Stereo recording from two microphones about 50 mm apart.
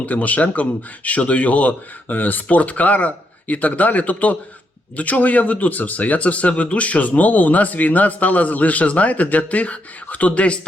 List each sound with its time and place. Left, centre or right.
0.0 s speech: left